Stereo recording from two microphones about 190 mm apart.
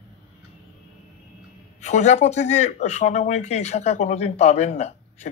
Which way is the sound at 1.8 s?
35° left (ahead or behind).